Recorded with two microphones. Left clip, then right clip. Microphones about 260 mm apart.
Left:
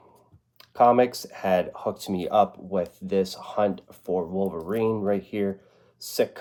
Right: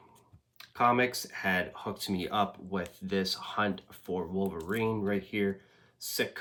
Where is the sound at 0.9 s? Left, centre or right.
Right.